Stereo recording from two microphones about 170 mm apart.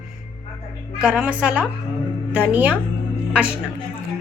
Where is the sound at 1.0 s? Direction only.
5° right (ahead or behind).